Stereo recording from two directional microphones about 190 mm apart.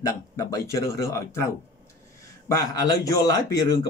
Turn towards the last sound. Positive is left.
turn(degrees=20)  # may be behind; listen again after turning